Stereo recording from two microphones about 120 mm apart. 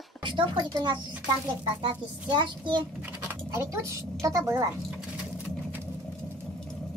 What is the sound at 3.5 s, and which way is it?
Speech, 25° right (ahead or behind).